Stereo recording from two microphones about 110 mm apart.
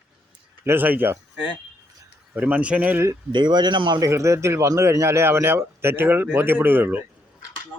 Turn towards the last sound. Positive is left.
turn(degrees=-20)  # may be behind; listen again after turning